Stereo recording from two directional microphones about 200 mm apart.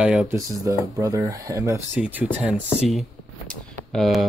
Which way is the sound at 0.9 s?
15° right (ahead or behind).